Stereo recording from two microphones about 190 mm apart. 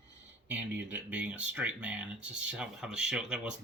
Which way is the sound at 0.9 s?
5° right (ahead or behind).